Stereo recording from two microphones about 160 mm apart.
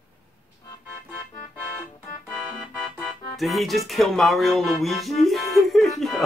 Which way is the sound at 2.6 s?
5° right (ahead or behind).